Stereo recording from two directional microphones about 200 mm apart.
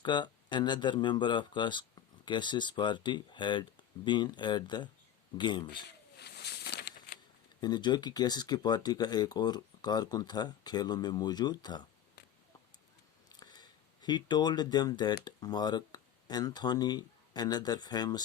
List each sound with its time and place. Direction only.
0.0 s speech: 20° left (ahead or behind)
6.1 s a sound: 55° left (ahead or behind)
7.6 s speech: 20° left (ahead or behind)
13.2 s speech: 20° left (ahead or behind)